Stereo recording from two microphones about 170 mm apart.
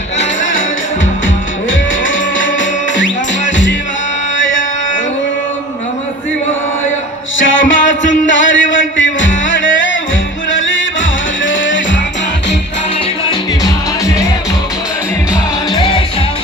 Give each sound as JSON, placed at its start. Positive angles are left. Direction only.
{"t": 2.0, "sound": "music", "side_deg": 90}
{"t": 7.3, "sound": "music", "side_deg": 90}
{"t": 15.7, "sound": "music", "side_deg": 30}